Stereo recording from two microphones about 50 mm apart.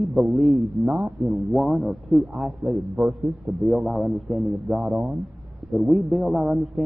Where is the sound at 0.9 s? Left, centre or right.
Centre.